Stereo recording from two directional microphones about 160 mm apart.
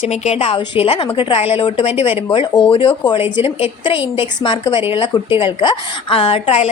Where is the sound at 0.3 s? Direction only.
40° left (ahead or behind).